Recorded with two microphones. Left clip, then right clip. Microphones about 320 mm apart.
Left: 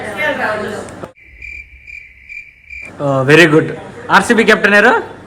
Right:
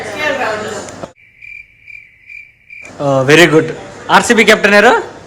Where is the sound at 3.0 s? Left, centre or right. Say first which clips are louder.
Right 1 dB; centre.